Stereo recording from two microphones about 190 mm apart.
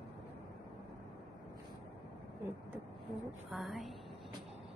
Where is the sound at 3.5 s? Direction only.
Centre (ahead or behind).